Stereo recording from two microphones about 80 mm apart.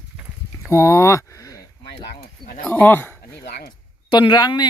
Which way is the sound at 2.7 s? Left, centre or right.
Left.